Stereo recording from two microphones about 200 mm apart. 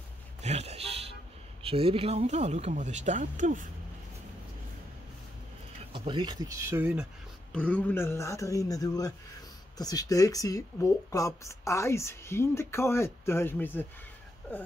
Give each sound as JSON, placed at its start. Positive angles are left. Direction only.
{"t": 0.4, "sound": "a sound", "side_deg": -30}
{"t": 1.6, "sound": "speech", "side_deg": -30}
{"t": 5.9, "sound": "speech", "side_deg": -25}
{"t": 7.5, "sound": "speech", "side_deg": 5}